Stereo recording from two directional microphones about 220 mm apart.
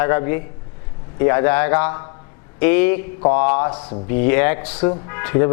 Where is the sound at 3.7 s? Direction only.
25° left (ahead or behind).